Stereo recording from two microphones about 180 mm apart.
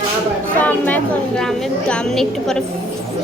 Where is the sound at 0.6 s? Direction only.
10° left (ahead or behind).